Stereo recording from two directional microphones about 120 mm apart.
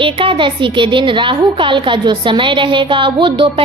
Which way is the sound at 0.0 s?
45° right (ahead or behind).